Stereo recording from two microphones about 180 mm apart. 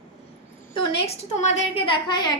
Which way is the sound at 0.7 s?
30° left (ahead or behind).